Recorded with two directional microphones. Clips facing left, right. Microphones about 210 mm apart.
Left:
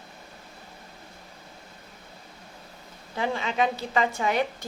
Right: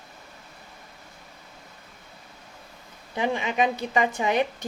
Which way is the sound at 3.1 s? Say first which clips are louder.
Right 2 dB; 15° right (ahead or behind).